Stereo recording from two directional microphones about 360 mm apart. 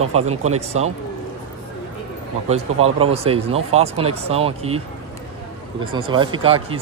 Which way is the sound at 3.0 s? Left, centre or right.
Centre.